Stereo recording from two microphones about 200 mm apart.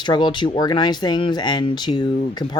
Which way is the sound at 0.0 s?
20° left (ahead or behind).